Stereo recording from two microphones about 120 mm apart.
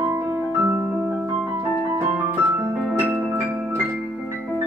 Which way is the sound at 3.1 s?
15° right (ahead or behind).